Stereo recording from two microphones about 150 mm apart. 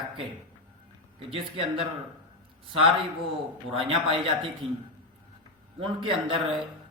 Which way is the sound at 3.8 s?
35° right (ahead or behind).